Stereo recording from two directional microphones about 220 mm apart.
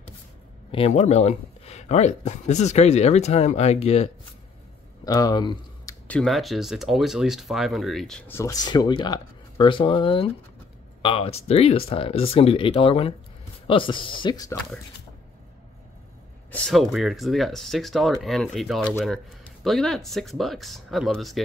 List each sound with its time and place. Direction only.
0.7 s speech: 25° left (ahead or behind)
5.0 s speech: 15° left (ahead or behind)
6.0 s speech: centre (ahead or behind)
16.5 s speech: centre (ahead or behind)